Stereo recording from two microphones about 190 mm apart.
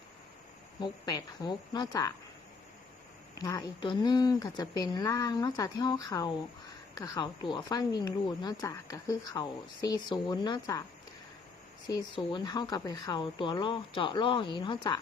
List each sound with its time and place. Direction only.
0.8 s speech: 20° left (ahead or behind)
3.3 s speech: 20° left (ahead or behind)
11.9 s speech: 20° left (ahead or behind)